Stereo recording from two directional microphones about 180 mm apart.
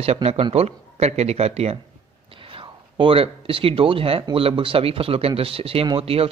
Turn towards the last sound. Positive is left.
turn(degrees=-30)  # may be behind; listen again after turning